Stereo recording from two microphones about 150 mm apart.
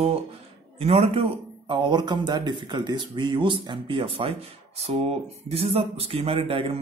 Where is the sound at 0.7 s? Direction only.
40° right (ahead or behind).